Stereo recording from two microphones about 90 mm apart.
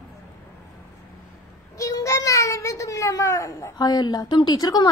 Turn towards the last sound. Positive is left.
turn(degrees=45)  # may be behind; listen again after turning